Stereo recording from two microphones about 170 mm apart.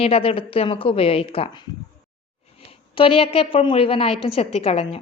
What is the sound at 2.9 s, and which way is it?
A woman's voice, 30° left (ahead or behind).